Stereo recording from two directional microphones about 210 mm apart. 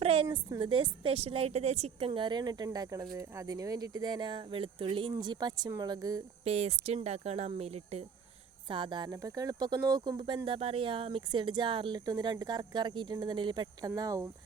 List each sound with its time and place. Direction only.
0.0 s a sound: 25° right (ahead or behind)
0.3 s a woman's voice: 20° right (ahead or behind)
6.4 s a woman's voice: 30° right (ahead or behind)